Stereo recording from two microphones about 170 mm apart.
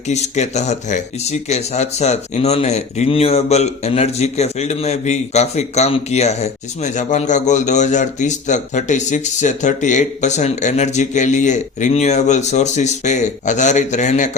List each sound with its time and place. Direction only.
0.1 s speech: 40° left (ahead or behind)